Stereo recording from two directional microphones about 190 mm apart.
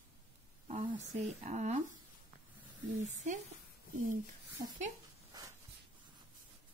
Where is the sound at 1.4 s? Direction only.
40° right (ahead or behind).